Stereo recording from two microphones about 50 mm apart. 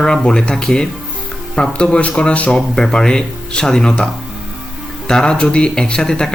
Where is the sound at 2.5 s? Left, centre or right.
Centre.